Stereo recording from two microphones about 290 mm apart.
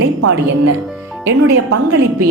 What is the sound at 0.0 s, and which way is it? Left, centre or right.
Speech, right.